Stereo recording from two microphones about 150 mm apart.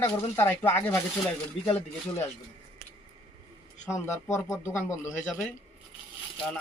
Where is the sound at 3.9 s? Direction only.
20° left (ahead or behind).